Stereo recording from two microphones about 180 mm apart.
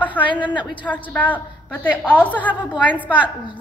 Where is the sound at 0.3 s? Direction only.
25° left (ahead or behind).